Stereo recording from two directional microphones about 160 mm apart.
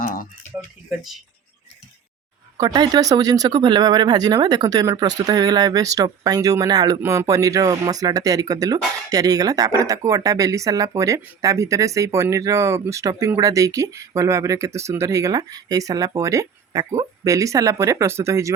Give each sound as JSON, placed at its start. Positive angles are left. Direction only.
{"t": 0.0, "sound": "a sound", "side_deg": 60}
{"t": 0.9, "sound": "speech", "side_deg": 0}
{"t": 2.6, "sound": "speech", "side_deg": -25}